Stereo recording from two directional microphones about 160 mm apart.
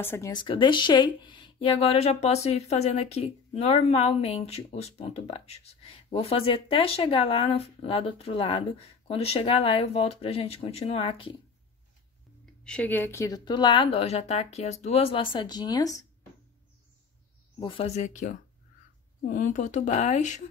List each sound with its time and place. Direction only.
0.0 s speech: 15° left (ahead or behind)
0.3 s speech: 30° left (ahead or behind)
12.6 s speech: 10° left (ahead or behind)
17.6 s speech: 35° left (ahead or behind)